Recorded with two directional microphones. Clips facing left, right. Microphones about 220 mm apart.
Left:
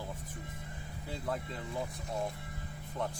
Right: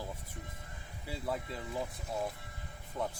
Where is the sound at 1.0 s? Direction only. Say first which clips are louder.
Even; 5° right (ahead or behind).